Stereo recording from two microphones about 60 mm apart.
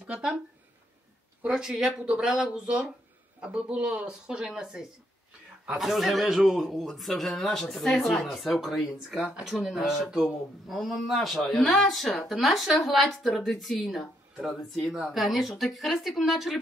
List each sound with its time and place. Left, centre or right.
0.0 s speech: centre
1.5 s speech: centre
14.3 s speech: centre
14.6 s speech: centre